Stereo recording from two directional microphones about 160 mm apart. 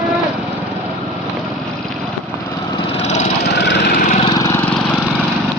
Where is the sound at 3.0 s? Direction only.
45° left (ahead or behind).